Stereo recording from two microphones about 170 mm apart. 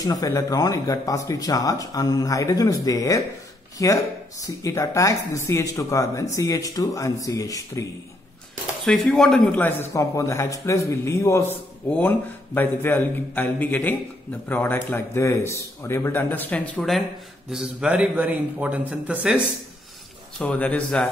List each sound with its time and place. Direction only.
0.0 s speech: 20° left (ahead or behind)
8.8 s a man's voice: 5° left (ahead or behind)
20.3 s a man's voice: 5° left (ahead or behind)